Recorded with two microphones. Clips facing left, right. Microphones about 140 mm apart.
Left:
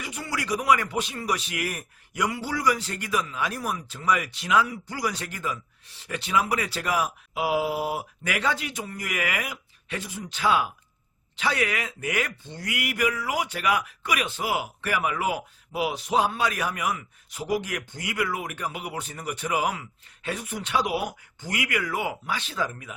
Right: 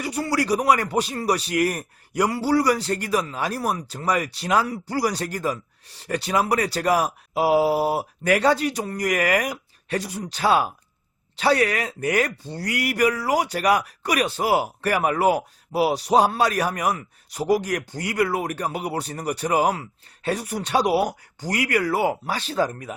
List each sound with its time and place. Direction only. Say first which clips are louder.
0.0 s speech: right 9 dB; 35° right (ahead or behind)